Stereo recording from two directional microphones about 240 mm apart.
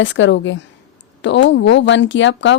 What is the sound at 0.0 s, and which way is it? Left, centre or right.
A woman's voice, left.